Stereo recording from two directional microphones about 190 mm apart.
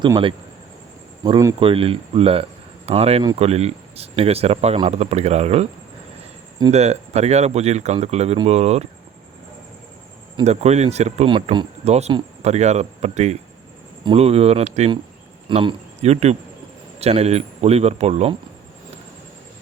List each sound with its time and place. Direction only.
0.0 s speech: 25° right (ahead or behind)
6.7 s speech: 35° right (ahead or behind)
10.3 s a man's voice: 35° right (ahead or behind)